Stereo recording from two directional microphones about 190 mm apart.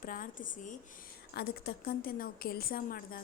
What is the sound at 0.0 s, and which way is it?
Speech, 45° left (ahead or behind).